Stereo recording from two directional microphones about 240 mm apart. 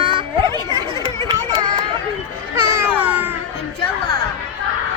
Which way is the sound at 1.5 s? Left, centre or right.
Centre.